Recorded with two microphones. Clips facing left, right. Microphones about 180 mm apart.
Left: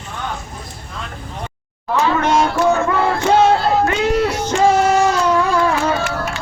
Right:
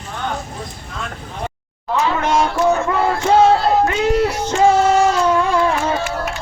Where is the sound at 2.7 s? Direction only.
25° right (ahead or behind).